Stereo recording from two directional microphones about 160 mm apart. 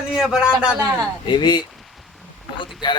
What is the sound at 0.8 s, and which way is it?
Speech, 25° right (ahead or behind).